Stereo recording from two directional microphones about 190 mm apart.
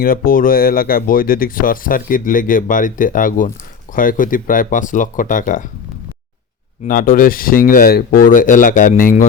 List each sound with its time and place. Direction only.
0.0 s speech: 50° left (ahead or behind)
6.8 s speech: 50° left (ahead or behind)